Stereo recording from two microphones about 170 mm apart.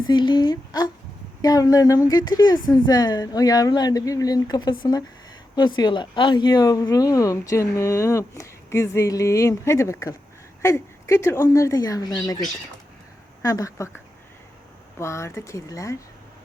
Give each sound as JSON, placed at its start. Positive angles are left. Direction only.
{"t": 0.0, "sound": "a woman's voice", "side_deg": 25}
{"t": 13.4, "sound": "a woman's voice", "side_deg": 20}